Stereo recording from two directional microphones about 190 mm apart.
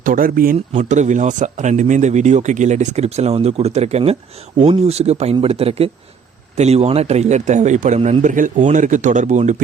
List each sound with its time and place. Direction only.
0.0 s speech: 45° right (ahead or behind)